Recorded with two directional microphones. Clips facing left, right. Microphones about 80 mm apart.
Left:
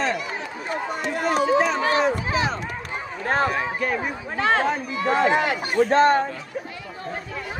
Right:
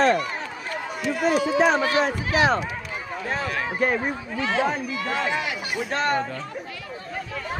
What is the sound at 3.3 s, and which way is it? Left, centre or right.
Speech, left.